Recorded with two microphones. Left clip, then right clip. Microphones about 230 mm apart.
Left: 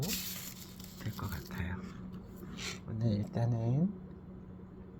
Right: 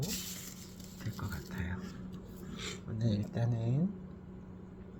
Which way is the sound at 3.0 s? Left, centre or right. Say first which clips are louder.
Left 1 dB; centre.